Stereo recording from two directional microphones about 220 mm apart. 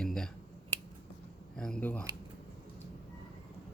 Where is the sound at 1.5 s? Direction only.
5° left (ahead or behind).